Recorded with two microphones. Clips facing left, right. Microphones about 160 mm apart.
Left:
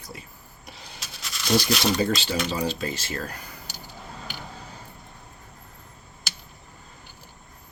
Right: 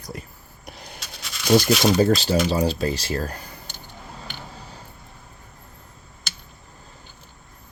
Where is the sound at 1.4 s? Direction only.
50° right (ahead or behind); by 3.4 s 35° right (ahead or behind).